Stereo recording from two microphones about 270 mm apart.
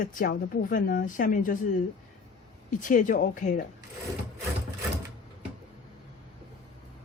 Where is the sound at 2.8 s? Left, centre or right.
Left.